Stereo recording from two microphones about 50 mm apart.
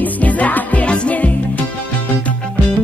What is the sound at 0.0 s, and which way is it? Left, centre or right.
Music, left.